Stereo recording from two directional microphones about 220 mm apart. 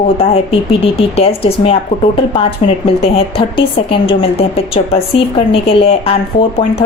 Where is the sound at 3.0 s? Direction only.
25° left (ahead or behind).